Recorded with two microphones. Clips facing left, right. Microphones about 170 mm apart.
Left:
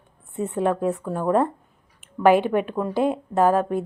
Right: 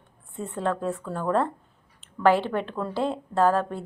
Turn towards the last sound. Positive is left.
turn(degrees=15)  # may be behind; listen again after turning